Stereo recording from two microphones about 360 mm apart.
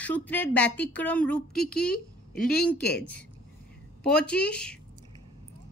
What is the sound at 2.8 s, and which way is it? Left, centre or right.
Speech, left.